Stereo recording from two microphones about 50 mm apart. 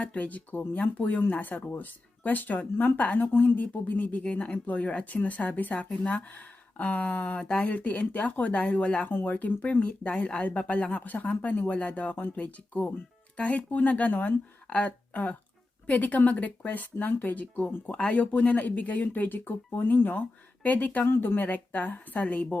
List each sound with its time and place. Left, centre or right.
0.0 s speech: left
21.1 s speech: left